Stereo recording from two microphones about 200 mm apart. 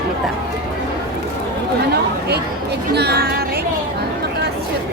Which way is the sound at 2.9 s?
55° right (ahead or behind).